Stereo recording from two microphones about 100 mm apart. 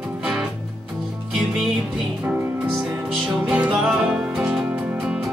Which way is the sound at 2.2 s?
15° right (ahead or behind).